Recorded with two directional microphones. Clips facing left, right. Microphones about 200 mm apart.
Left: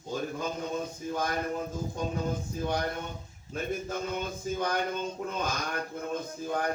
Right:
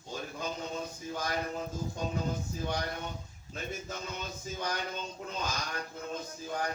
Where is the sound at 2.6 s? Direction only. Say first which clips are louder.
Left 5 dB; 50° left (ahead or behind).